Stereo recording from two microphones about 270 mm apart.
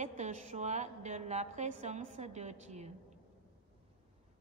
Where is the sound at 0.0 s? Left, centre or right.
Right.